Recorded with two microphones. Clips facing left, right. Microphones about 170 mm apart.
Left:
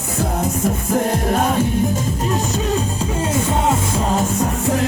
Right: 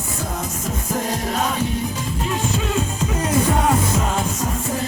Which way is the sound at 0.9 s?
55° left (ahead or behind).